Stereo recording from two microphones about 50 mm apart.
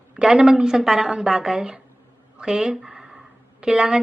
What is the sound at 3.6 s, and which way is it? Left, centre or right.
Speech, centre.